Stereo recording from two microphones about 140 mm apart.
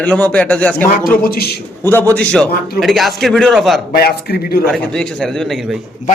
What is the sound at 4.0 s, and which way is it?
Speech, 90° left.